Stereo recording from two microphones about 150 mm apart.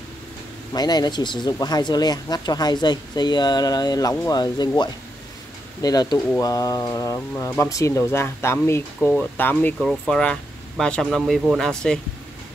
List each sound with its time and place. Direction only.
0.7 s speech: 25° left (ahead or behind); by 9.8 s 10° left (ahead or behind)
9.8 s speech: centre (ahead or behind)